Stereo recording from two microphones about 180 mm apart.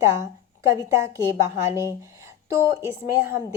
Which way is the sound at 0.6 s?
20° right (ahead or behind).